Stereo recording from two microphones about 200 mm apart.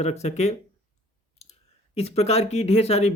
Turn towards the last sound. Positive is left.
turn(degrees=30)  # may be behind; listen again after turning